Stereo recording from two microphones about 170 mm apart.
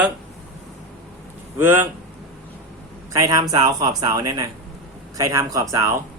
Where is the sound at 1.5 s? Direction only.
10° right (ahead or behind).